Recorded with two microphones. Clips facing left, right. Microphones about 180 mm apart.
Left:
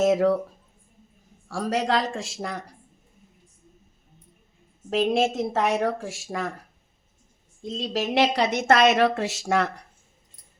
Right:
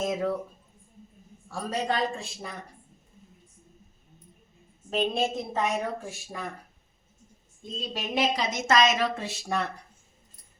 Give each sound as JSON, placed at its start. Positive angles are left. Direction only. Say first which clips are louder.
{"t": 0.0, "sound": "speech", "louder": "left 8 dB", "side_deg": 75}
{"t": 1.5, "sound": "a woman's voice", "louder": "left 5 dB", "side_deg": 80}
{"t": 4.9, "sound": "a woman's voice", "louder": "left 5 dB", "side_deg": 85}
{"t": 7.6, "sound": "a woman's voice", "louder": "left 8 dB", "side_deg": 90}